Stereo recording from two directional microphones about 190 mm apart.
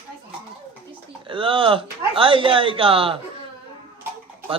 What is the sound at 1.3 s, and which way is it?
Speech, 25° right (ahead or behind).